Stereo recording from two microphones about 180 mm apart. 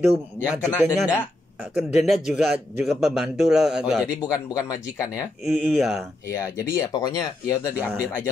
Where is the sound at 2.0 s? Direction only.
Centre (ahead or behind).